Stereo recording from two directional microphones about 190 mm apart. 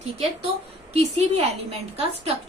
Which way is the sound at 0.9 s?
35° right (ahead or behind).